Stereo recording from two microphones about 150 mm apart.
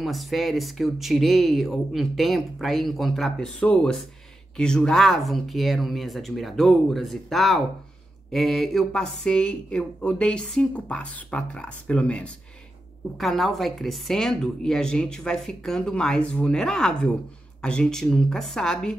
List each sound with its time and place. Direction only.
0.0 s speech: centre (ahead or behind)